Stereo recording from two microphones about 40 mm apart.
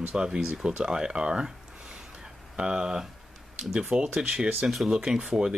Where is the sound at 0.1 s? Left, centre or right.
Centre.